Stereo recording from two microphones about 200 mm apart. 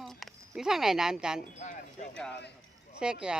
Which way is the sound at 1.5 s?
35° left (ahead or behind).